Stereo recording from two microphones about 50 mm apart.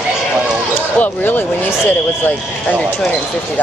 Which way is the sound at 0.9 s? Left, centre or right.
Left.